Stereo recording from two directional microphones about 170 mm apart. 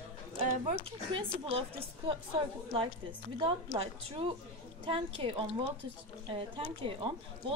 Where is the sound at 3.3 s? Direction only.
30° right (ahead or behind).